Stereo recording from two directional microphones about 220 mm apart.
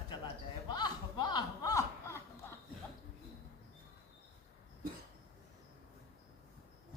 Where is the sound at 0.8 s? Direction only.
20° left (ahead or behind).